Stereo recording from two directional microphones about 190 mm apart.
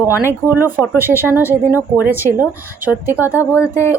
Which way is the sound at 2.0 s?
10° right (ahead or behind).